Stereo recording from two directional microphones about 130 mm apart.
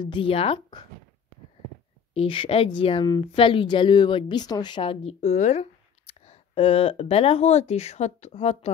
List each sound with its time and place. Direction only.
0.0 s speech: 40° left (ahead or behind)
2.1 s speech: 45° left (ahead or behind)
5.0 s speech: 60° left (ahead or behind)